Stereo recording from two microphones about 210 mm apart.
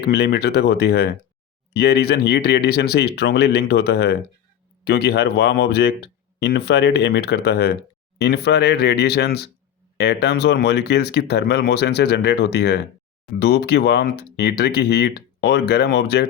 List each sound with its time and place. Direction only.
0.0 s speech: 50° left (ahead or behind)